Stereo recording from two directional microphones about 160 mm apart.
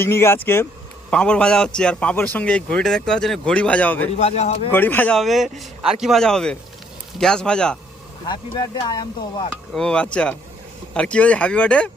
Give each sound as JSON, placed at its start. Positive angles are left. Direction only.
{"t": 0.0, "sound": "a man's voice", "side_deg": 15}
{"t": 4.2, "sound": "speech", "side_deg": 45}
{"t": 4.7, "sound": "speech", "side_deg": 10}
{"t": 8.3, "sound": "speech", "side_deg": 25}
{"t": 9.7, "sound": "a man's voice", "side_deg": 5}